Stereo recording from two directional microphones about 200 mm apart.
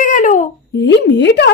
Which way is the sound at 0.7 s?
60° left (ahead or behind).